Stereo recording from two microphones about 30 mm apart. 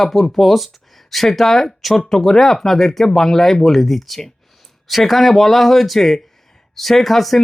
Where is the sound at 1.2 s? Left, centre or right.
Centre.